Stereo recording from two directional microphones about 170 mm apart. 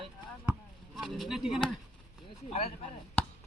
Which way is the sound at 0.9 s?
Centre (ahead or behind).